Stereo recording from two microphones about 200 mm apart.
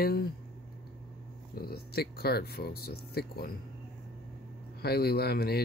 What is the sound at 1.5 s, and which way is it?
Speech, 50° left (ahead or behind).